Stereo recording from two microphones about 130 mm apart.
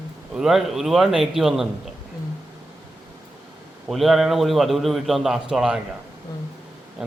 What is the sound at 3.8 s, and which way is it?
A man's voice, centre (ahead or behind).